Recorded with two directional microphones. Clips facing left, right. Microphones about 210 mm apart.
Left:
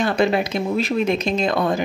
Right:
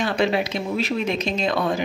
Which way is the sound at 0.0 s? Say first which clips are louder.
Left 3 dB; 45° left (ahead or behind).